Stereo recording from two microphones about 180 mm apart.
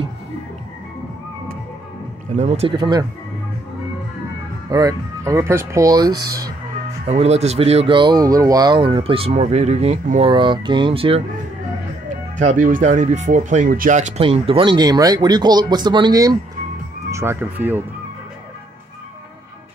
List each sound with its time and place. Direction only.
2.3 s speech: 35° right (ahead or behind)
2.7 s speech: 25° right (ahead or behind)
4.6 s speech: 20° right (ahead or behind)
7.1 s speech: 35° right (ahead or behind)
12.4 s speech: 45° right (ahead or behind); by 17.8 s 10° right (ahead or behind)